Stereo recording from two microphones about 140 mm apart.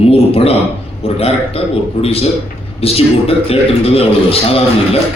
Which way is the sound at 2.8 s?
45° left (ahead or behind).